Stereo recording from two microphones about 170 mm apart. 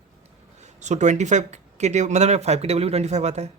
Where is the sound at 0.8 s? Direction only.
45° right (ahead or behind).